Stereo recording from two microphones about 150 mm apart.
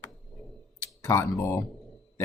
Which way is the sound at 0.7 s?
20° left (ahead or behind).